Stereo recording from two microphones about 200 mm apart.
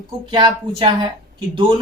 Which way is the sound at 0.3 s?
25° right (ahead or behind).